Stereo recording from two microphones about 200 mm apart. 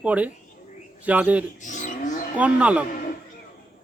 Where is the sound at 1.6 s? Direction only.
40° left (ahead or behind).